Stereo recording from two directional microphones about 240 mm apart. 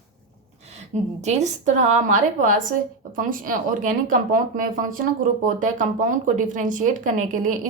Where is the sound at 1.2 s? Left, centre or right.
Right.